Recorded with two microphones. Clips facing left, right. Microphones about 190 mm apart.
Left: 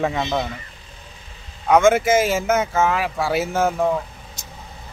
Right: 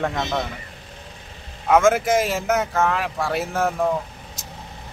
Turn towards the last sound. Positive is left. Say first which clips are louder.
# left 1 dB
turn(degrees=0)  # may be behind; listen again after turning